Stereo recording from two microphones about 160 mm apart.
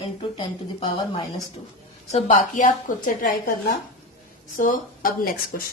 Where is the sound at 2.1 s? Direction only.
45° left (ahead or behind).